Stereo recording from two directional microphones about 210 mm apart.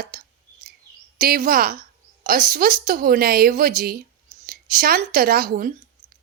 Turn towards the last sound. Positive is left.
turn(degrees=-40)  # may be behind; listen again after turning